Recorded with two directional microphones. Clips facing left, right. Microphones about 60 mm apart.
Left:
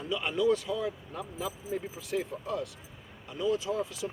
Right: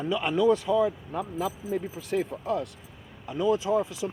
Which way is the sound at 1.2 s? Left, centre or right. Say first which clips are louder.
Right 9 dB; right.